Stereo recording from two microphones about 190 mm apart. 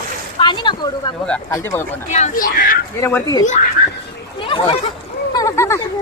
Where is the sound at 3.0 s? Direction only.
15° left (ahead or behind).